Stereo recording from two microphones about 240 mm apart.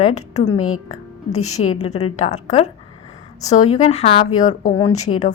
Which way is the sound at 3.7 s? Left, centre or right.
Left.